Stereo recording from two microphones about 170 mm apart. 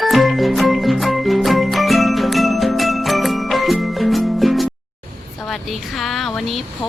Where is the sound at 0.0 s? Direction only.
Centre (ahead or behind).